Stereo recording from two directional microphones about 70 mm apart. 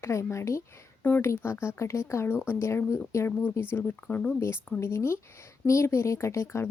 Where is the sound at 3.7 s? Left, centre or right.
Left.